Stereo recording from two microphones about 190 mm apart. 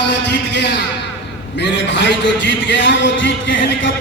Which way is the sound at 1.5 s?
70° left (ahead or behind).